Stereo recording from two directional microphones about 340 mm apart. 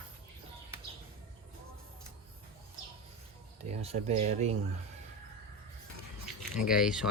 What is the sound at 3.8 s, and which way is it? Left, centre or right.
Speech, centre.